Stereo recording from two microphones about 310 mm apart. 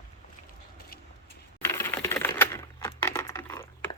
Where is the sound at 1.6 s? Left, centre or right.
Centre.